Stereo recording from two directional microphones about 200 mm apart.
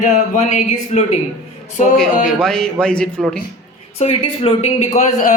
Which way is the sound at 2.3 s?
5° left (ahead or behind).